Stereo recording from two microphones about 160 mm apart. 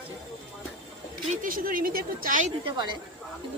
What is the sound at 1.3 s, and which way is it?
Speech, 60° right (ahead or behind).